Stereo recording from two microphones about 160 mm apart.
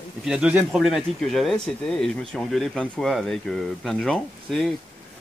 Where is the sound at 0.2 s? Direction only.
5° right (ahead or behind).